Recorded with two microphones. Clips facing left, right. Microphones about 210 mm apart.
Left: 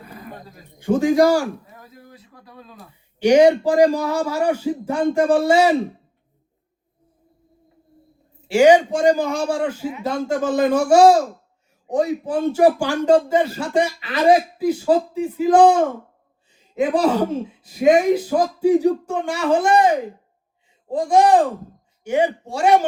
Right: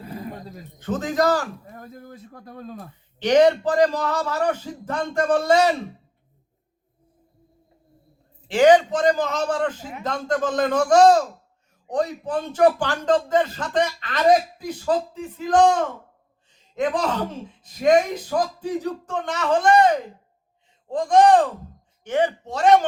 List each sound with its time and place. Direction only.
0.0 s a sound: 30° right (ahead or behind)
0.8 s speech: 10° left (ahead or behind)
1.7 s speech: 50° right (ahead or behind)
3.2 s speech: 10° left (ahead or behind)
8.4 s speech: 10° left (ahead or behind)
16.5 s a sound: 10° left (ahead or behind)
17.6 s speech: 10° left (ahead or behind)